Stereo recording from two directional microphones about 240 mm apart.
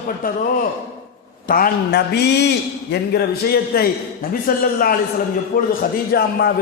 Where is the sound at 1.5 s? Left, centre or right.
Left.